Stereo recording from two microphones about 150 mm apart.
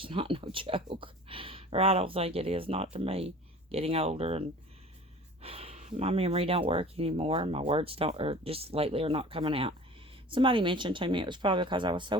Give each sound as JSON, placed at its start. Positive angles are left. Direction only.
{"t": 0.0, "sound": "speech", "side_deg": -35}